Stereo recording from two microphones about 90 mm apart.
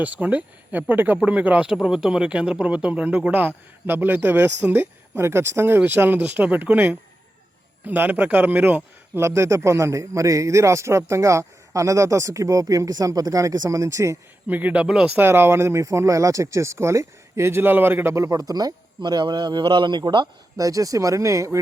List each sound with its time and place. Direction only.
0.0 s speech: 15° right (ahead or behind)
9.2 s a man's voice: 35° right (ahead or behind)
14.4 s a man's voice: 15° right (ahead or behind); by 18.7 s 45° right (ahead or behind)
19.0 s a man's voice: 55° right (ahead or behind)
20.6 s a man's voice: 40° right (ahead or behind)